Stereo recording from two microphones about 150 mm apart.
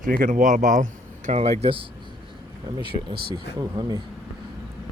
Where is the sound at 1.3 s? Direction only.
45° right (ahead or behind); by 4.0 s 25° right (ahead or behind).